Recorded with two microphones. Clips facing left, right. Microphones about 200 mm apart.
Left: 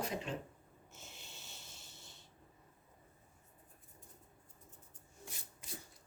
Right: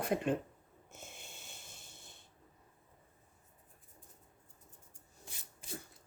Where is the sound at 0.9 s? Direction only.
50° right (ahead or behind).